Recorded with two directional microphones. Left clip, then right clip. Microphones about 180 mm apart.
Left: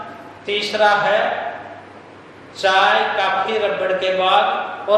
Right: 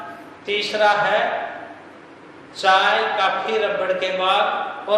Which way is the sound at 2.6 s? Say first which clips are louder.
Left 2 dB; 15° right (ahead or behind).